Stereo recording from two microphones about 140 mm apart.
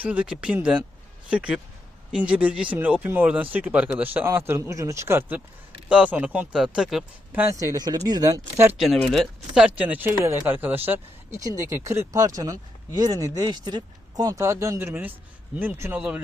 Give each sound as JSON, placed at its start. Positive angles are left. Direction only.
{"t": 0.0, "sound": "speech", "side_deg": -10}
{"t": 7.6, "sound": "speech", "side_deg": -25}
{"t": 8.8, "sound": "speech", "side_deg": 0}
{"t": 9.6, "sound": "speech", "side_deg": -10}